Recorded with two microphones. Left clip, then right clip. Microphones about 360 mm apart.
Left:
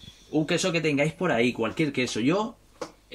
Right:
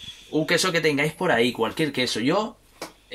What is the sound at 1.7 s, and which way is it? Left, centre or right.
Speech, centre.